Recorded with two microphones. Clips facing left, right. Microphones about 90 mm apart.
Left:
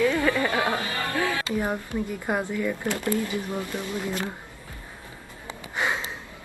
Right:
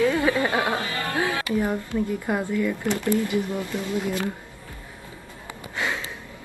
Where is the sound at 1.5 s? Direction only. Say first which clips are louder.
Right 3 dB; 20° left (ahead or behind).